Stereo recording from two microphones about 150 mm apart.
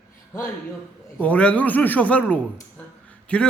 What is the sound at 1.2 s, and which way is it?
A man's voice, 10° left (ahead or behind).